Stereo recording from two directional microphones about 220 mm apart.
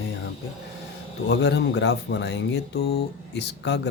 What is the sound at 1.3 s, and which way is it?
Speech, 50° left (ahead or behind).